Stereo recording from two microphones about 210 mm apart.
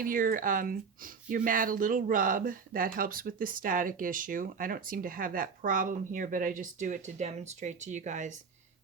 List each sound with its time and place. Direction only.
0.0 s speech: 40° right (ahead or behind)